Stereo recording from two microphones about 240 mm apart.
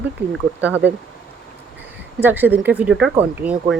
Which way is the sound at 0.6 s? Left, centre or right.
Centre.